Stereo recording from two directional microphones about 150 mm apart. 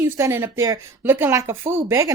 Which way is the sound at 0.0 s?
20° right (ahead or behind).